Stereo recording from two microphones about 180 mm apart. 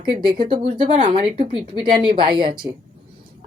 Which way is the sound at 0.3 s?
25° right (ahead or behind).